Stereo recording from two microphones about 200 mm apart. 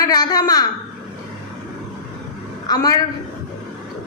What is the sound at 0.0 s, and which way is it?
Speech, 20° left (ahead or behind).